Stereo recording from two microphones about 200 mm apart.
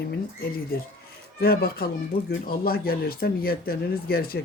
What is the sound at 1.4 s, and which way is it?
Speech, 50° left (ahead or behind).